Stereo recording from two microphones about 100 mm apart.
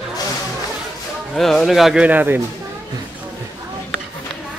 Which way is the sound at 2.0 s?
20° right (ahead or behind).